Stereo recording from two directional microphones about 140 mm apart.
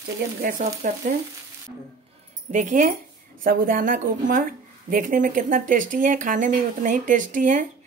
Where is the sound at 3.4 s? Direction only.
85° right.